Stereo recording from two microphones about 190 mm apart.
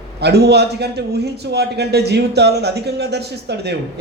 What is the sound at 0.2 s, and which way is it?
A man's voice, 60° right (ahead or behind).